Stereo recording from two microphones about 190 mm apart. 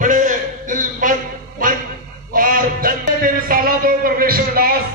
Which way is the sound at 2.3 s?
50° right (ahead or behind).